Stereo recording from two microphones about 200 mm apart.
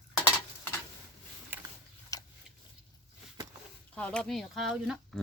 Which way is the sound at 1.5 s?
10° right (ahead or behind).